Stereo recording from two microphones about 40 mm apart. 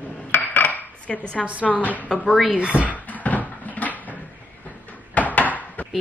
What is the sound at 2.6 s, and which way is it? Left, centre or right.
Speech, right.